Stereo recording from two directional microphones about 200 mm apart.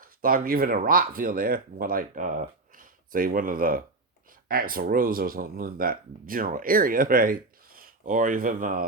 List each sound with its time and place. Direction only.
0.0 s speech: 45° right (ahead or behind)